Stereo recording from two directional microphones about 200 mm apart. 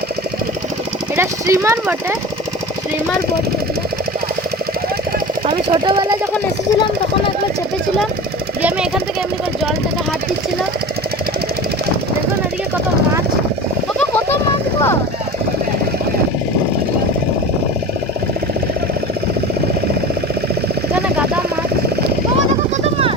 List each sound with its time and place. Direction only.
1.1 s speech: 15° right (ahead or behind)
5.5 s speech: 25° right (ahead or behind)